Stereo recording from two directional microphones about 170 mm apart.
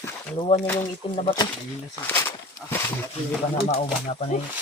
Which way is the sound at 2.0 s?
10° left (ahead or behind).